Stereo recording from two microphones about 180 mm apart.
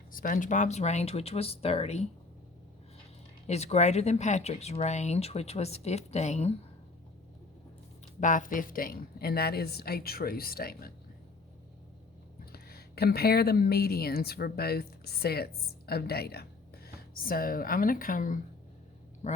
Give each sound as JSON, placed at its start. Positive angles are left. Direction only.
{"t": 0.1, "sound": "speech", "side_deg": 50}
{"t": 3.4, "sound": "speech", "side_deg": 35}
{"t": 8.2, "sound": "a woman's voice", "side_deg": 45}
{"t": 12.5, "sound": "speech", "side_deg": 60}